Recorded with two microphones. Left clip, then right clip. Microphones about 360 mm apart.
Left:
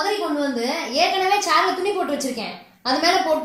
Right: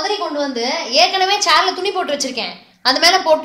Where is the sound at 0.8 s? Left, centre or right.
Right.